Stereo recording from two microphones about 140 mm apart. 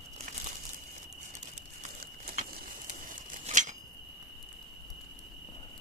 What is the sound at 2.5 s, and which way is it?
Scissors, 75° right (ahead or behind).